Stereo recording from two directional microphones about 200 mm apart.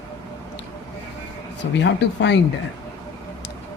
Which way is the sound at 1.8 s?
60° left (ahead or behind).